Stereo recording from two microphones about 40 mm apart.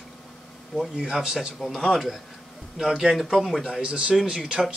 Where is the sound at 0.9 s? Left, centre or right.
Centre.